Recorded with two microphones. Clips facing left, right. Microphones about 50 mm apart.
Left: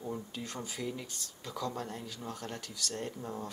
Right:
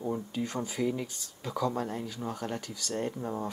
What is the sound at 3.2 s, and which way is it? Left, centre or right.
Speech, centre.